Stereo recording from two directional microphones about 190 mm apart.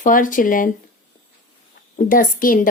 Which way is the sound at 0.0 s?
45° left (ahead or behind).